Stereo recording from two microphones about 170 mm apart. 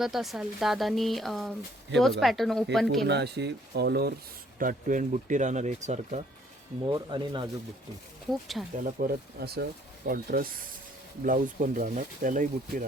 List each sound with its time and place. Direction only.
0.0 s speech: centre (ahead or behind)
3.1 s speech: 80° right
4.6 s speech: 50° right (ahead or behind)
6.8 s speech: 25° right (ahead or behind)
8.3 s speech: centre (ahead or behind)
9.0 s speech: 65° right (ahead or behind)